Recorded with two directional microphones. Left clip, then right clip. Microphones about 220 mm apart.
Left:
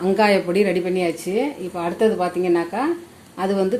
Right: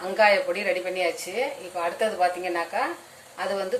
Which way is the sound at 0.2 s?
40° left (ahead or behind).